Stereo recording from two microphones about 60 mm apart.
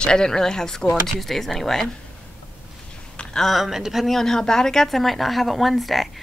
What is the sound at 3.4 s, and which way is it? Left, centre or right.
A woman's voice, centre.